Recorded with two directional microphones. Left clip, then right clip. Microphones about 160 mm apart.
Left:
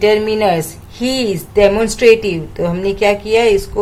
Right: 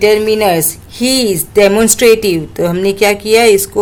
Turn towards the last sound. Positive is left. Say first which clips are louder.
# right 4 dB
turn(degrees=-45)  # may be behind; listen again after turning